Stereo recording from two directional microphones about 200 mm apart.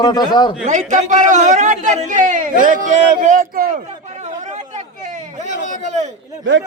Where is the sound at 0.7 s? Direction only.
35° right (ahead or behind).